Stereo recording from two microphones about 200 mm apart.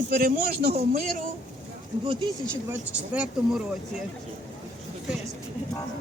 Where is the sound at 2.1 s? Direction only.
25° right (ahead or behind).